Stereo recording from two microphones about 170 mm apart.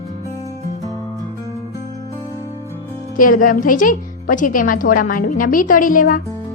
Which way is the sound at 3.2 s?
55° left (ahead or behind).